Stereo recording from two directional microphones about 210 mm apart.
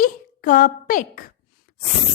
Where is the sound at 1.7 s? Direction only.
40° left (ahead or behind).